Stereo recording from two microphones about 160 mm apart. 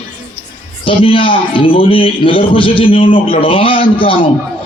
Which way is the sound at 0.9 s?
35° left (ahead or behind).